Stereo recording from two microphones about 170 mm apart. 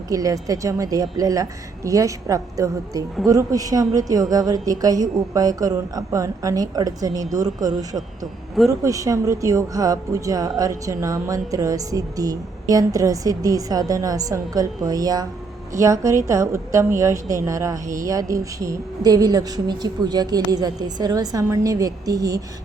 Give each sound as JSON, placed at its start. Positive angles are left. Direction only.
{"t": 0.1, "sound": "a woman's voice", "side_deg": -20}